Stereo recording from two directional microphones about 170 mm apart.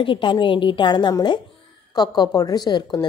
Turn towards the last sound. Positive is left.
turn(degrees=25)  # may be behind; listen again after turning